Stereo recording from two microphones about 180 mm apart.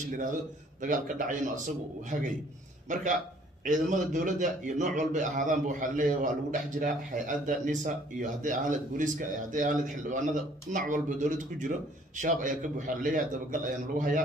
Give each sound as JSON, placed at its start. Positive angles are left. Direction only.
{"t": 0.1, "sound": "a man's voice", "side_deg": -45}
{"t": 2.9, "sound": "a man's voice", "side_deg": -45}